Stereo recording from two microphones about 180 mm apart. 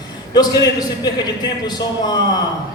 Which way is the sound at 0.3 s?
20° left (ahead or behind).